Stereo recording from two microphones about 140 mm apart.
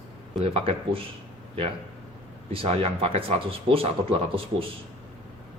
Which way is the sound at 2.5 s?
45° right (ahead or behind).